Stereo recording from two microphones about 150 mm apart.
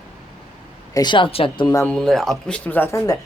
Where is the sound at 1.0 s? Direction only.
30° left (ahead or behind).